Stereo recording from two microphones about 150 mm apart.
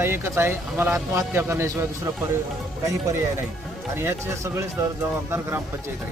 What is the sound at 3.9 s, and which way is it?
Speech, 15° right (ahead or behind).